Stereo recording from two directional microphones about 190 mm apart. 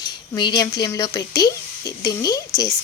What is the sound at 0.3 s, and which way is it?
A woman's voice, 20° left (ahead or behind).